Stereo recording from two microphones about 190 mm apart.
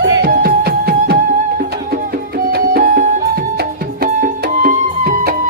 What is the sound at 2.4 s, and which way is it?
Music, 50° right (ahead or behind).